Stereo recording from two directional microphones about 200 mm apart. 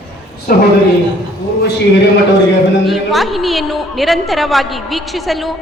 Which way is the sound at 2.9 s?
Centre (ahead or behind).